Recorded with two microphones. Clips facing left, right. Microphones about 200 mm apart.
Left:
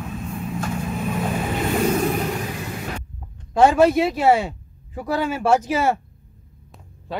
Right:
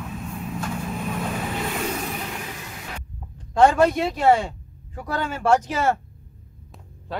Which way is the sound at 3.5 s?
5° left (ahead or behind).